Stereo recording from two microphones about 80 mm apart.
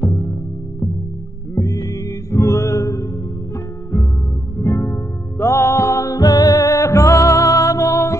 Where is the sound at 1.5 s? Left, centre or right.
Left.